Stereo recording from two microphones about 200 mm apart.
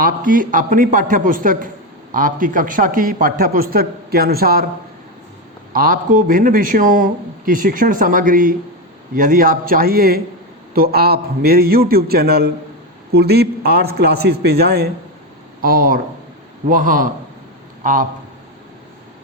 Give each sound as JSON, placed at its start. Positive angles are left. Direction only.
{"t": 0.0, "sound": "a man's voice", "side_deg": -45}
{"t": 5.7, "sound": "speech", "side_deg": -45}